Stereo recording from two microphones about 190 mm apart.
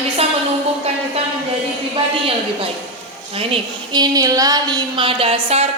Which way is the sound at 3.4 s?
25° right (ahead or behind).